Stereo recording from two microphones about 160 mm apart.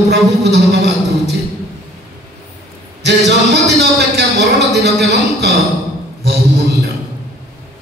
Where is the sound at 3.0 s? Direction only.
90° right.